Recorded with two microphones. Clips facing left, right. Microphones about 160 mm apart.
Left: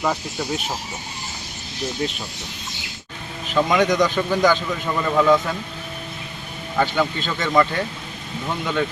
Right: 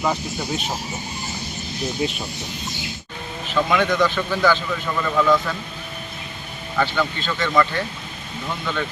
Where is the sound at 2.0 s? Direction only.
10° right (ahead or behind).